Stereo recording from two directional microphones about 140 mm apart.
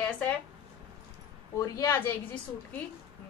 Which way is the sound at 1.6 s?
20° left (ahead or behind).